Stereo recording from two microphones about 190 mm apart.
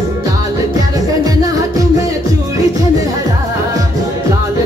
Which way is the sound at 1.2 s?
20° right (ahead or behind).